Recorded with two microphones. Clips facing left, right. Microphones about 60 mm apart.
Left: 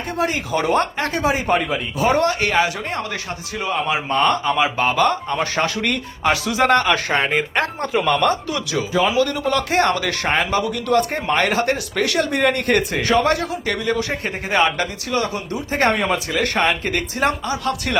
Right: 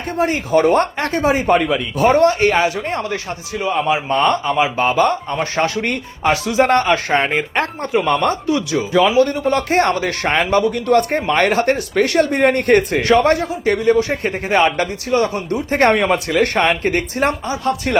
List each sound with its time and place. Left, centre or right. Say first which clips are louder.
0.2 s speech: right 6 dB; right
2.0 s speech: right 5 dB; right
8.9 s a man's voice: right 5 dB; right
9.1 s speech: right 4 dB; right
10.2 s speech: right 5 dB; right
15.5 s speech: right 5 dB; right